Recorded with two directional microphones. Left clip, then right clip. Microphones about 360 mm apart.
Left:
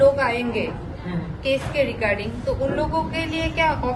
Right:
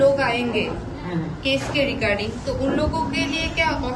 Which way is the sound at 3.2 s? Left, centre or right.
Centre.